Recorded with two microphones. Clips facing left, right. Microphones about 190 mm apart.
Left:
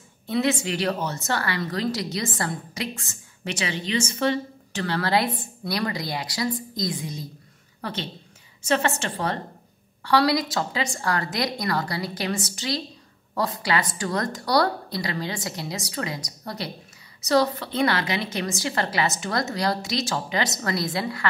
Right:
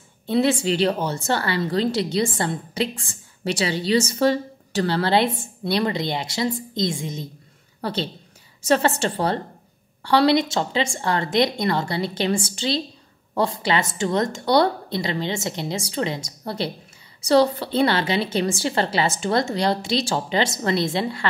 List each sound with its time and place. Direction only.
0.3 s a woman's voice: 30° right (ahead or behind)